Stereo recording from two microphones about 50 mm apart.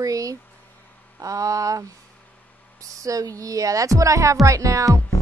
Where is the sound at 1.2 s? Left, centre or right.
Right.